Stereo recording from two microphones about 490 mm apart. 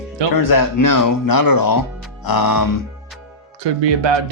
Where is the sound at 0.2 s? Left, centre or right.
Right.